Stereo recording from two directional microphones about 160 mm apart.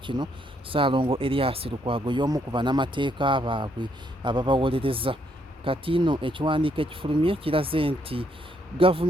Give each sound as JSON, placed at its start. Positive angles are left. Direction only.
{"t": 0.0, "sound": "speech", "side_deg": -30}